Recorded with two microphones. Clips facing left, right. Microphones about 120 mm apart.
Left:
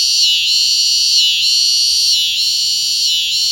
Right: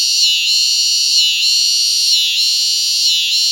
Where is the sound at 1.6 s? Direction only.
50° right (ahead or behind).